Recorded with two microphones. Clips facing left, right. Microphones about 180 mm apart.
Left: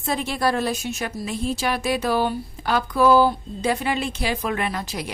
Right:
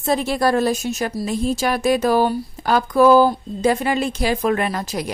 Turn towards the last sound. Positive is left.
turn(degrees=-45)  # may be behind; listen again after turning